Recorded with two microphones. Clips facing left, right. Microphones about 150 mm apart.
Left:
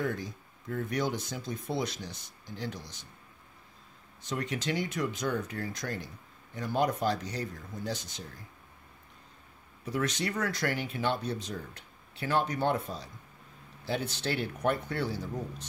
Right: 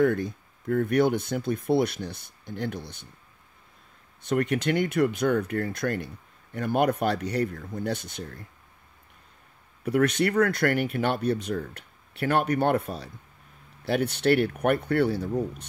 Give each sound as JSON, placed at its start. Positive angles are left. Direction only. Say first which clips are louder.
{"t": 0.0, "sound": "speech", "louder": "right 10 dB", "side_deg": -60}
{"t": 4.2, "sound": "speech", "louder": "right 9 dB", "side_deg": -60}
{"t": 9.8, "sound": "speech", "louder": "right 9 dB", "side_deg": -60}